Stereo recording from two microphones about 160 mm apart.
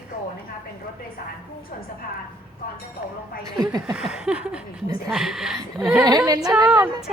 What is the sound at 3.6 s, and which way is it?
Speech, 25° right (ahead or behind).